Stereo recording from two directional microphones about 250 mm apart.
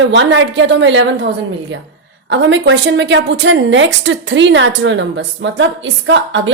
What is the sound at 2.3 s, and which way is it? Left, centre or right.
A woman's voice, right.